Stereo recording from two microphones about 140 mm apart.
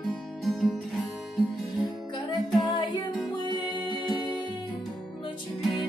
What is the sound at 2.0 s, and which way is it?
Music, 30° left (ahead or behind).